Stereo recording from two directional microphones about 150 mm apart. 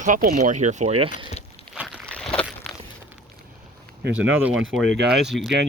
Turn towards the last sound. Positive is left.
turn(degrees=0)  # may be behind; listen again after turning